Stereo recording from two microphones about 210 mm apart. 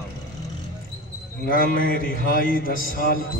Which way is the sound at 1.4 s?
45° left (ahead or behind).